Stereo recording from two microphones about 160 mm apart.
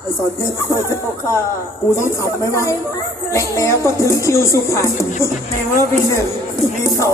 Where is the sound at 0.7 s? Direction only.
20° left (ahead or behind).